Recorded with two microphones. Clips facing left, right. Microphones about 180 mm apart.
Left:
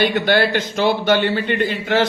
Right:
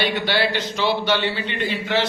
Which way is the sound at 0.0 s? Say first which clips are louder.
Left 5 dB; 50° left (ahead or behind).